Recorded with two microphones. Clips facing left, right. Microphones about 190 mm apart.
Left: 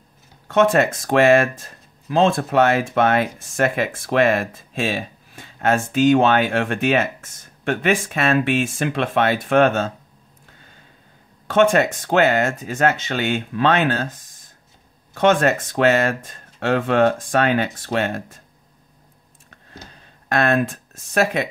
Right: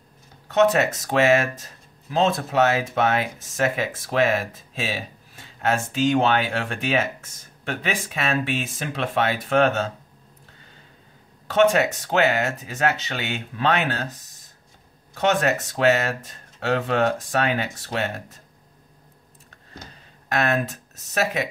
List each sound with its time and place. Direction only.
0.6 s speech: 50° left (ahead or behind)
11.6 s speech: 50° left (ahead or behind)
15.1 s speech: 55° left (ahead or behind)
20.2 s speech: 55° left (ahead or behind)